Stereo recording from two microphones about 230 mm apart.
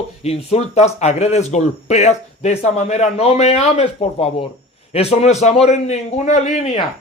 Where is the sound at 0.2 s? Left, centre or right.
Left.